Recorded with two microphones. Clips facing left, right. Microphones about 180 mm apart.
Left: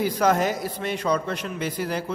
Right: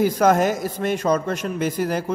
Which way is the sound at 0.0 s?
50° right (ahead or behind).